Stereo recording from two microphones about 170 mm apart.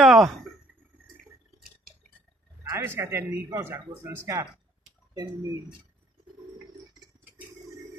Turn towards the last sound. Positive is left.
turn(degrees=-20)  # may be behind; listen again after turning